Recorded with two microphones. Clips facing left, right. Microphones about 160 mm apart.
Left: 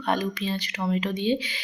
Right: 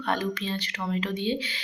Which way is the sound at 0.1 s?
15° left (ahead or behind).